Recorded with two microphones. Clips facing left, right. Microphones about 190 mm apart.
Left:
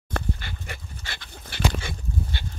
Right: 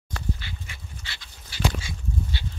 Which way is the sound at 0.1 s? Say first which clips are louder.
Left 3 dB; 55° left (ahead or behind).